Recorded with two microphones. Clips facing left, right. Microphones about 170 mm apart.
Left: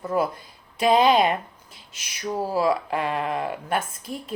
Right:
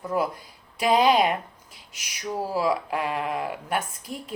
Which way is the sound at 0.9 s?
10° right (ahead or behind).